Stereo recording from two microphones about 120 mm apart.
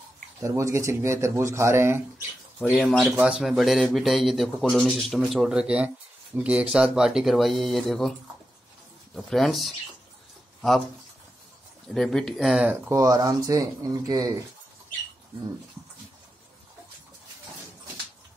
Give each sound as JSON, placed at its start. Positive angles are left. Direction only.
{"t": 0.4, "sound": "speech", "side_deg": -25}
{"t": 3.0, "sound": "a man's voice", "side_deg": -10}
{"t": 9.1, "sound": "a man's voice", "side_deg": 0}
{"t": 11.9, "sound": "a man's voice", "side_deg": 5}
{"t": 12.4, "sound": "speech", "side_deg": -5}
{"t": 12.9, "sound": "speech", "side_deg": -25}